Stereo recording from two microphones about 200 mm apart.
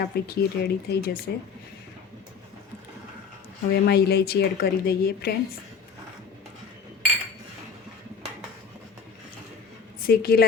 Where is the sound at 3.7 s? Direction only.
55° left (ahead or behind).